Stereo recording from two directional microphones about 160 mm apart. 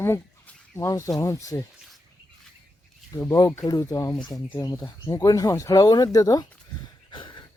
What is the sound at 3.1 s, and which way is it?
Speech, 20° left (ahead or behind).